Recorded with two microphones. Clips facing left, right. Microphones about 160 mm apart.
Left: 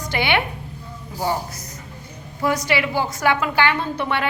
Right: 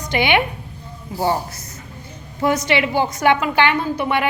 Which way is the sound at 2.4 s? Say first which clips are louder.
Right 3 dB; 20° right (ahead or behind).